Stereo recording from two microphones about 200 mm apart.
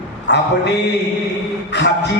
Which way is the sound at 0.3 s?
60° left (ahead or behind).